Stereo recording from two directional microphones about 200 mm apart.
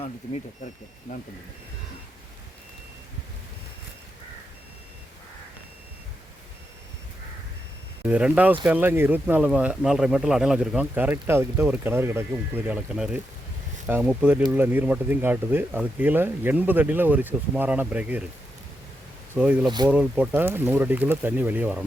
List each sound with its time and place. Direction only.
8.0 s speech: 5° right (ahead or behind)
19.3 s speech: 10° right (ahead or behind)
19.6 s speech: 20° right (ahead or behind)
19.9 s speech: 5° right (ahead or behind)